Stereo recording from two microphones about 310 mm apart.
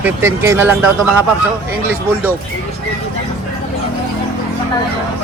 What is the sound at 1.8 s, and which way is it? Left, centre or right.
Speech, centre.